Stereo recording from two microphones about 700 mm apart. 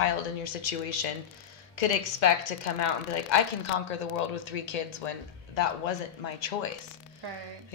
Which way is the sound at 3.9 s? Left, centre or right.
Left.